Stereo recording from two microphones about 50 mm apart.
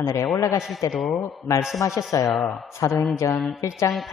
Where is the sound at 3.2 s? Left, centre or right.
Left.